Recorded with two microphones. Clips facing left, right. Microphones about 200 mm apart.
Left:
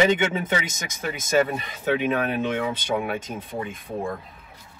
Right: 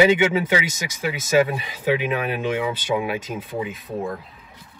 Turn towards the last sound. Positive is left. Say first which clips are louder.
# right 2 dB
turn(degrees=-5)  # may be behind; listen again after turning